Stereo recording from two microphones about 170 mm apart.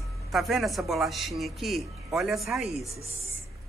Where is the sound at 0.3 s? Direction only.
Centre (ahead or behind).